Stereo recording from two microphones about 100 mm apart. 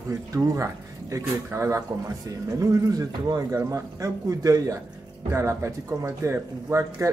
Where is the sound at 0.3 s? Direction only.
35° right (ahead or behind).